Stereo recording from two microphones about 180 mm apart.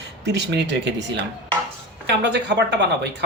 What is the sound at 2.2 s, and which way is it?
Speech, 70° right (ahead or behind).